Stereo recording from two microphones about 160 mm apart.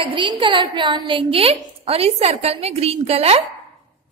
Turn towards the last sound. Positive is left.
turn(degrees=-40)  # may be behind; listen again after turning